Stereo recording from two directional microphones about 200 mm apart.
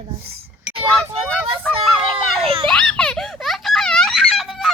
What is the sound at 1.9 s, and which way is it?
Speech, centre (ahead or behind).